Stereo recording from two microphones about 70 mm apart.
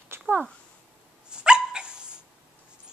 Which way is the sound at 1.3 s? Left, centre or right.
Centre.